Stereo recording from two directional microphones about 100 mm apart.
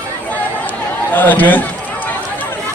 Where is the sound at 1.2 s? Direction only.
15° left (ahead or behind).